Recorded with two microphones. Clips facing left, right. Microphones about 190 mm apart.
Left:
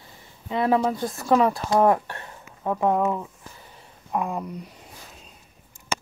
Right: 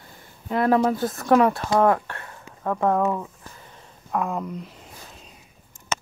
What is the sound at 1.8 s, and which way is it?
Speech, 15° left (ahead or behind).